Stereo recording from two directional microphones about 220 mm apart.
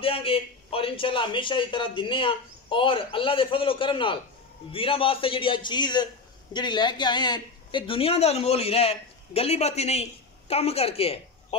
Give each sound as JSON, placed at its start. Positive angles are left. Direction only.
{"t": 0.0, "sound": "a man's voice", "side_deg": 25}